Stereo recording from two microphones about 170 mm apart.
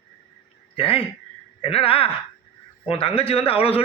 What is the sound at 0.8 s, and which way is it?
Speech, 35° left (ahead or behind).